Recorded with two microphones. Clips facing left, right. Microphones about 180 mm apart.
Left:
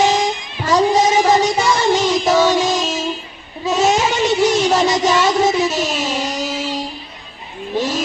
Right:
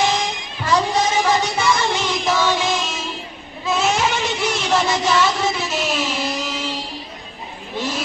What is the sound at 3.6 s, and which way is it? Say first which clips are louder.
Child singing: left 4 dB; 40° left (ahead or behind).